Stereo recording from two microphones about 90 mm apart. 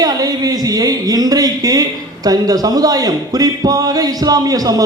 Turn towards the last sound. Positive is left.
turn(degrees=-45)  # may be behind; listen again after turning